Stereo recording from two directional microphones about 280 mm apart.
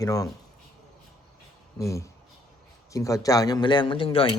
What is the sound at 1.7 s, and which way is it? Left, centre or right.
A man's voice, centre.